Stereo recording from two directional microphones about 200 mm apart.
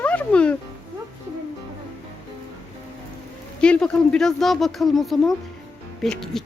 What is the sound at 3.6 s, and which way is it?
Speech, 5° left (ahead or behind).